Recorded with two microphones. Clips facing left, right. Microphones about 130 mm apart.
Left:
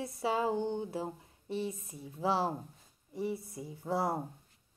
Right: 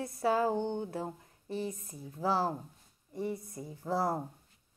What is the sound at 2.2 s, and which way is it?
Speech, centre (ahead or behind).